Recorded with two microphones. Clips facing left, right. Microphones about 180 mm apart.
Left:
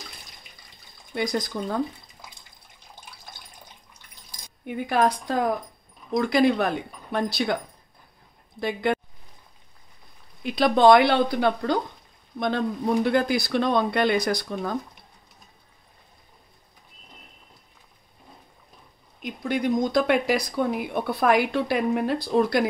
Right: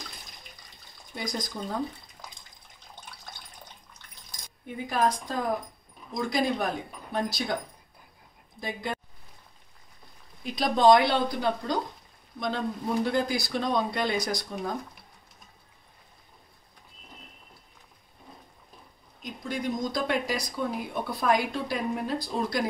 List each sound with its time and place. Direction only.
4.6 s speech: 70° left (ahead or behind)
8.5 s speech: 70° left (ahead or behind)
10.4 s speech: 70° left (ahead or behind)
19.2 s speech: 65° left (ahead or behind)